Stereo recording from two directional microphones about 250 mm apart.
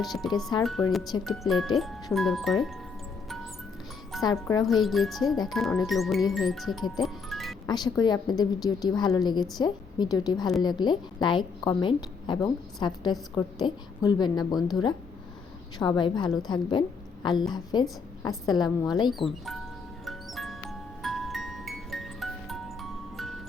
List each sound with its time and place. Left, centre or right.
0.0 s speech: centre
4.3 s a woman's voice: centre
4.6 s speech: centre
6.9 s music: centre
7.7 s a woman's voice: centre
20.1 s music: centre